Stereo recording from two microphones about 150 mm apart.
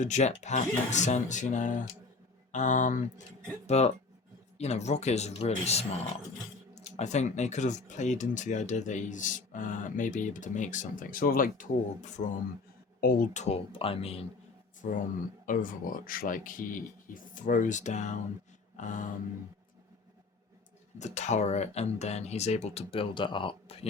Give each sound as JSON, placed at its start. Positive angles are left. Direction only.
{"t": 0.0, "sound": "speech", "side_deg": 50}
{"t": 3.7, "sound": "speech", "side_deg": 45}
{"t": 12.0, "sound": "speech", "side_deg": 55}
{"t": 13.0, "sound": "speech", "side_deg": 70}
{"t": 14.8, "sound": "speech", "side_deg": 65}
{"t": 21.0, "sound": "speech", "side_deg": 50}